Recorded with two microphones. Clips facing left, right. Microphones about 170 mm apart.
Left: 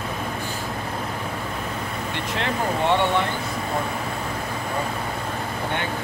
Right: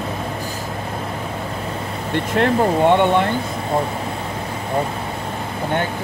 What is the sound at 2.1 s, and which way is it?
Speech, 50° right (ahead or behind).